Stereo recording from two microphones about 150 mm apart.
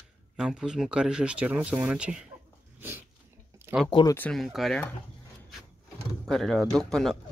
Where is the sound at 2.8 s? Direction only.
15° right (ahead or behind).